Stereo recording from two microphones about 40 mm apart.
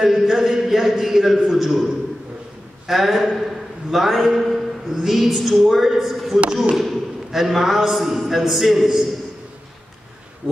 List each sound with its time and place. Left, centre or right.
0.0 s a man's voice: centre
2.9 s a man's voice: centre
6.4 s speech: right
6.7 s a sound: centre
7.4 s a man's voice: centre